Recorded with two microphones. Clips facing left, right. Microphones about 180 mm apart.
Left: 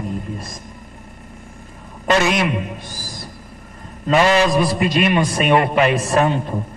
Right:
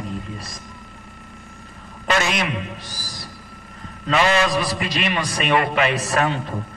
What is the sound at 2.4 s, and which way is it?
A man's voice, 50° left (ahead or behind).